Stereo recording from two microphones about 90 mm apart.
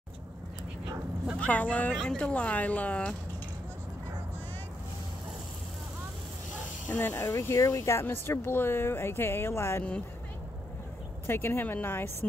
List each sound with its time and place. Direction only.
1.4 s speech: 15° left (ahead or behind)
6.9 s speech: 20° left (ahead or behind)
7.3 s speech: 35° left (ahead or behind)
11.2 s speech: 25° left (ahead or behind)